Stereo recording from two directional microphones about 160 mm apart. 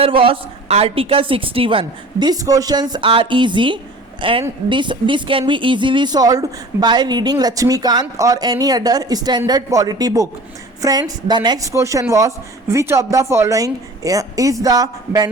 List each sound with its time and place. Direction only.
0.0 s a woman's voice: 35° right (ahead or behind)